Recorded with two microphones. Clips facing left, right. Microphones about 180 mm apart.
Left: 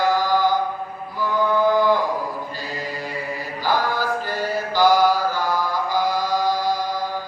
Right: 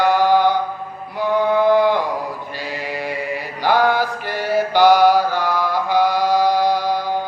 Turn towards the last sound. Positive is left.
turn(degrees=-70)  # may be behind; listen again after turning